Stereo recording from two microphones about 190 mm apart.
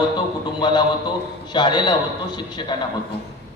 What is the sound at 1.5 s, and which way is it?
Speech, 25° left (ahead or behind).